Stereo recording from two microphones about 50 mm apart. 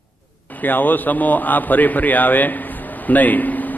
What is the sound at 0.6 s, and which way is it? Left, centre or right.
A man's voice, left.